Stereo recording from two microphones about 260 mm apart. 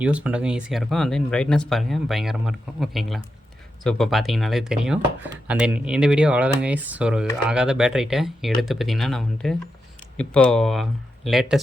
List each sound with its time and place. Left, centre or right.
0.0 s speech: centre